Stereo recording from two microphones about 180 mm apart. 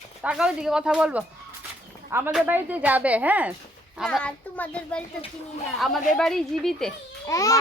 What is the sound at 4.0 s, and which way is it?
Speech, 5° left (ahead or behind).